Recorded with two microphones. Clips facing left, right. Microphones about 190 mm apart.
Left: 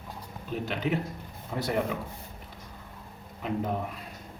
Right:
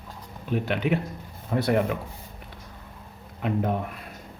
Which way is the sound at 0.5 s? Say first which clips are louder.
Right 5 dB; 65° right (ahead or behind).